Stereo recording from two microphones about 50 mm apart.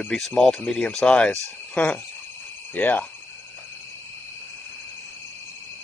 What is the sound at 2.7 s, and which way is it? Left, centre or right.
Speech, left.